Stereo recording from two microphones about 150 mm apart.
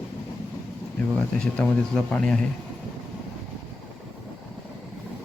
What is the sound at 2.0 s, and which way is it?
Speech, 5° left (ahead or behind).